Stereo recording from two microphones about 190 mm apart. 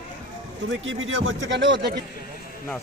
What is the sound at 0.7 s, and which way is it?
Speech, 85° right.